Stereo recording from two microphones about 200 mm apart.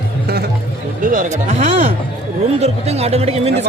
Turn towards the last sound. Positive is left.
turn(degrees=-30)  # may be behind; listen again after turning